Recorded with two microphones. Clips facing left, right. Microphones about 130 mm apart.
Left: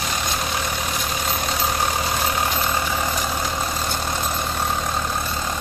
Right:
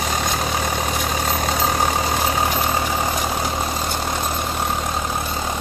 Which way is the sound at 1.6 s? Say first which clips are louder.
Right 3 dB; 90° right.